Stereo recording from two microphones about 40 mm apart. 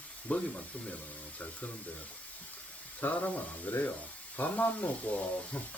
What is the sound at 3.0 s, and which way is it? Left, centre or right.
Speech, left.